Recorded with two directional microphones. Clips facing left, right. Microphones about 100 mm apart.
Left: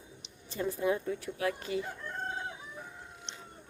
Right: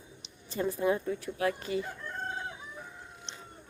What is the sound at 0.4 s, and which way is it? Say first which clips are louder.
Speech: right 2 dB; 40° right (ahead or behind).